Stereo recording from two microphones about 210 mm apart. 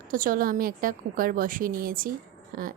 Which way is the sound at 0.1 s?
40° right (ahead or behind).